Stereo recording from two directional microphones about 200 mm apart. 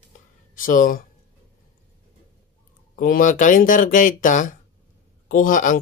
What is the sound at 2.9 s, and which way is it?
Speech, 45° left (ahead or behind).